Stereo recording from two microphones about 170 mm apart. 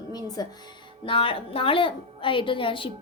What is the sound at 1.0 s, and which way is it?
A woman's voice, 30° left (ahead or behind).